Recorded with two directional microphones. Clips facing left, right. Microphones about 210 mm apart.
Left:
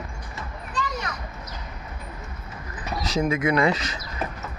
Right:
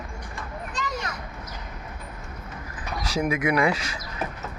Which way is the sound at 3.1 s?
15° right (ahead or behind).